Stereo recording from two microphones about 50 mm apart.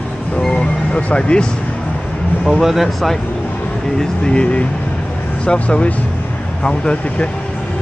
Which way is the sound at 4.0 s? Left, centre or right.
Centre.